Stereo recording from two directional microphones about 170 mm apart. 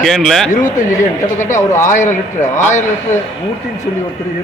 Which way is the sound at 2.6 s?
45° left (ahead or behind).